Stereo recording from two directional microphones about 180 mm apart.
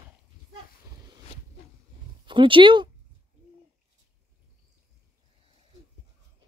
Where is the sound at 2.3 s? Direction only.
30° right (ahead or behind).